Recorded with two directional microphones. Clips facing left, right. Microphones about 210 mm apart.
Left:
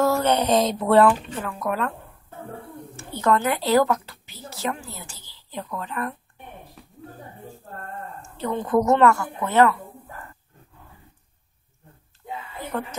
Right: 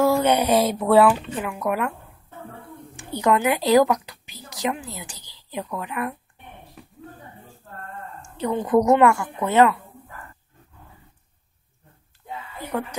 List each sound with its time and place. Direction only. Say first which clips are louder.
0.0 s speech: right 2 dB; 10° right (ahead or behind)
3.0 s speech: right 1 dB; 15° right (ahead or behind)
8.2 s speech: right 3 dB; 15° right (ahead or behind)